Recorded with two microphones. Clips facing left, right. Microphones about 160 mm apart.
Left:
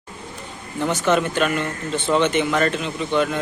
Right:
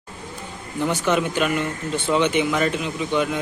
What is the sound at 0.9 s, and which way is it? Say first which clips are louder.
Speech: left 2 dB; 10° right (ahead or behind).